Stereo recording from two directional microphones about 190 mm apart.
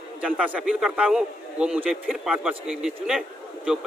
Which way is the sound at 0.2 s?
5° right (ahead or behind).